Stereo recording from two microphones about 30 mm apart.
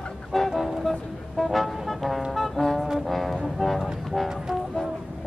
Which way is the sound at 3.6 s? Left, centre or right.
Centre.